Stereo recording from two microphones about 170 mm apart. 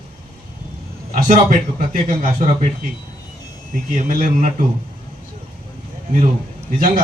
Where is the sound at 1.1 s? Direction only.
50° right (ahead or behind).